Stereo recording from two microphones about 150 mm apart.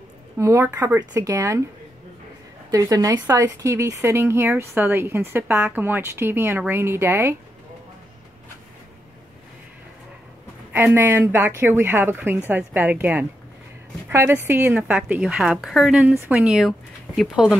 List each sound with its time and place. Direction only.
0.4 s speech: 20° right (ahead or behind)
2.7 s a woman's voice: 25° right (ahead or behind)
10.7 s a woman's voice: 15° right (ahead or behind)